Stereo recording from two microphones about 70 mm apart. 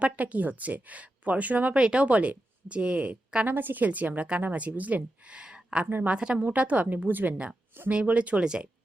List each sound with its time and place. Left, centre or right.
0.0 s speech: right
5.8 s speech: right
6.1 s a woman's voice: centre